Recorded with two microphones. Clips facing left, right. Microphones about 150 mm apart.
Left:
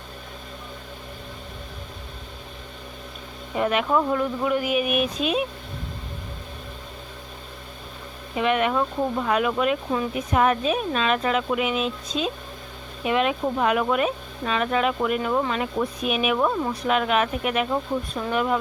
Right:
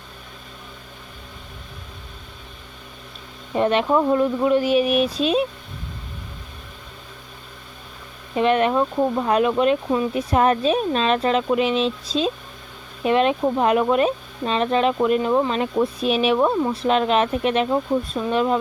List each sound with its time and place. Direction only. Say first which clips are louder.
3.5 s speech: right 3 dB; 30° right (ahead or behind)
8.4 s speech: right 4 dB; 35° right (ahead or behind)
17.7 s speech: right 5 dB; 20° right (ahead or behind)